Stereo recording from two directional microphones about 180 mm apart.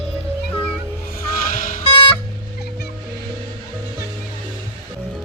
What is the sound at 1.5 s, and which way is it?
Music, 50° left (ahead or behind).